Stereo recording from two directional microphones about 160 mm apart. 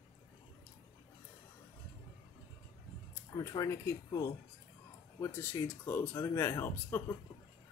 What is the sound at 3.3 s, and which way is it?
Speech, 20° left (ahead or behind).